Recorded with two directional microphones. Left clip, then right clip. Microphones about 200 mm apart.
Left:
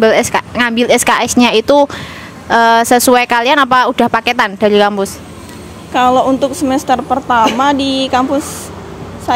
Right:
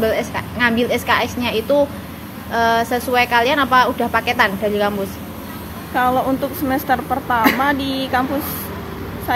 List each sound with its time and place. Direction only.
0.0 s speech: 55° left (ahead or behind)
5.9 s a woman's voice: 35° left (ahead or behind)